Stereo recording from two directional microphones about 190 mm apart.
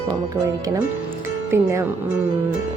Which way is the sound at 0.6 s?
20° right (ahead or behind).